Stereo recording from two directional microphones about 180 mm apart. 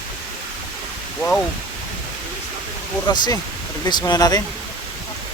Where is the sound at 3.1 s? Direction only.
25° left (ahead or behind).